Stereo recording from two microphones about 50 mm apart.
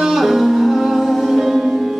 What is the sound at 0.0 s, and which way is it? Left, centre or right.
Music, centre.